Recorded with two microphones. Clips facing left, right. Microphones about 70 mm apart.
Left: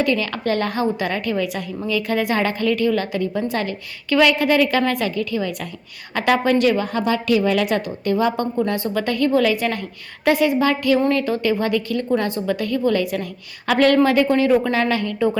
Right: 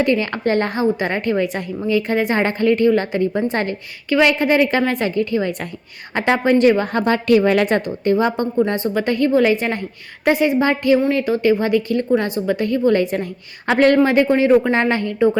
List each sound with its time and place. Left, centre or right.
0.0 s a woman's voice: right